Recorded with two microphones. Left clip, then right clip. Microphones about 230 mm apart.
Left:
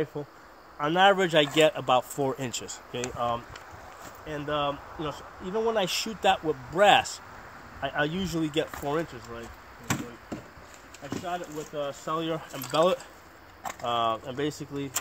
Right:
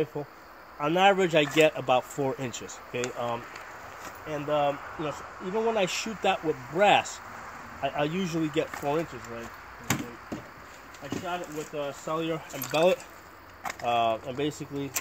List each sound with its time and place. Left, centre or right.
0.7 s speech: centre
11.1 s speech: centre